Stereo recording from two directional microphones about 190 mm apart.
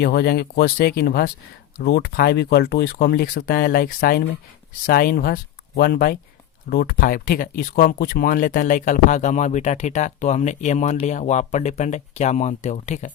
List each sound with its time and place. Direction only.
0.0 s speech: 60° left (ahead or behind); by 13.1 s 40° left (ahead or behind)